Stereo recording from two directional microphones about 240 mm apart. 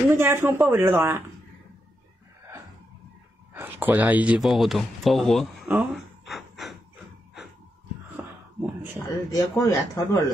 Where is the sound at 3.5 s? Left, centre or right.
Centre.